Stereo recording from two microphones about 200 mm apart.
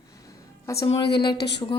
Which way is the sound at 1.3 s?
55° left (ahead or behind).